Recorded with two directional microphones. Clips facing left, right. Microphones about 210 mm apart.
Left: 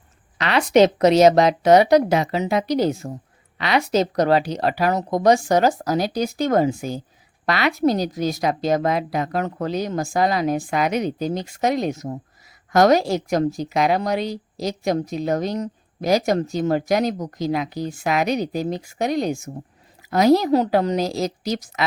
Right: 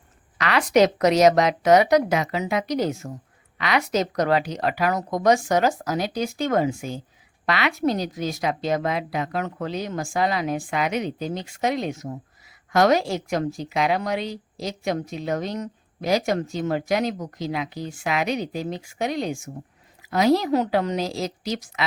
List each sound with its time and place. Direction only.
0.3 s a woman's voice: 25° left (ahead or behind)